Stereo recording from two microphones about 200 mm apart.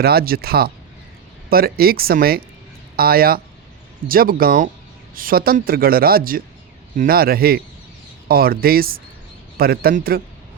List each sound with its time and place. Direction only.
0.0 s speech: 50° right (ahead or behind)